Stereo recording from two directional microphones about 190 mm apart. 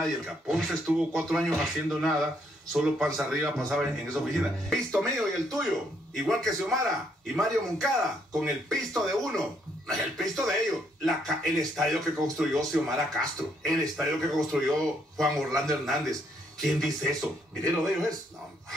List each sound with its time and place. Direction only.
0.0 s speech: centre (ahead or behind)